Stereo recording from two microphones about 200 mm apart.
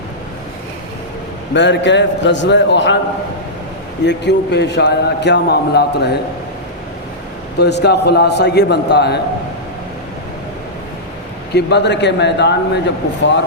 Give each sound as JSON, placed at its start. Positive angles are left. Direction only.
{"t": 1.5, "sound": "a man's voice", "side_deg": 60}
{"t": 4.0, "sound": "a man's voice", "side_deg": 60}
{"t": 7.6, "sound": "a man's voice", "side_deg": 55}
{"t": 11.5, "sound": "a man's voice", "side_deg": 60}